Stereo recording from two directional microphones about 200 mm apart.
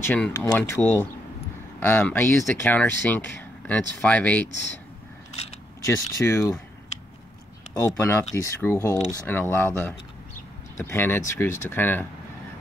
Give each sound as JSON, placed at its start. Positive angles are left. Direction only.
{"t": 0.0, "sound": "speech", "side_deg": 10}
{"t": 5.8, "sound": "speech", "side_deg": 15}
{"t": 7.7, "sound": "speech", "side_deg": 15}